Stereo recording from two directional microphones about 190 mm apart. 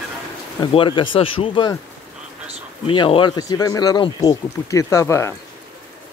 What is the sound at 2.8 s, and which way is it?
Speech, 25° left (ahead or behind).